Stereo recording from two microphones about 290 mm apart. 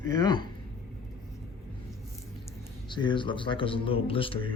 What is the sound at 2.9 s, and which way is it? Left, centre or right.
Speech, centre.